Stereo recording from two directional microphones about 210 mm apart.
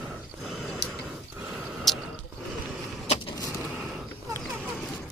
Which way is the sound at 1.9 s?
Centre (ahead or behind).